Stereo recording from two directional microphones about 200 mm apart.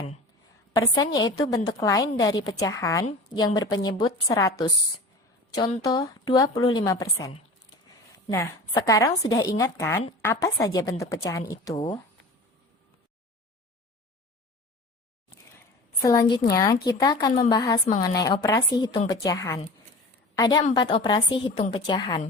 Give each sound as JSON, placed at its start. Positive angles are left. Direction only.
{"t": 0.7, "sound": "a woman's voice", "side_deg": 20}
{"t": 16.0, "sound": "a woman's voice", "side_deg": 15}